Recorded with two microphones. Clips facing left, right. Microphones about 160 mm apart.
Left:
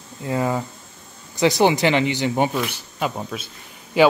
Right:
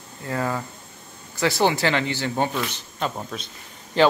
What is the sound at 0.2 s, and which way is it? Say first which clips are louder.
Speech: left 4 dB; 20° left (ahead or behind).